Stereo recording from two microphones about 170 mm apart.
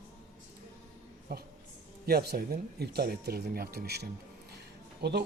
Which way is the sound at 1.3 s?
65° right (ahead or behind).